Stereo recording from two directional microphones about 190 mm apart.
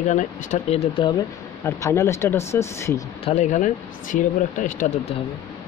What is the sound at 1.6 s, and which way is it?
Speech, 15° left (ahead or behind).